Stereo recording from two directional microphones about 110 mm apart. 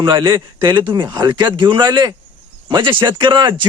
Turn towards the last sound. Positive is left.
turn(degrees=-45)  # may be behind; listen again after turning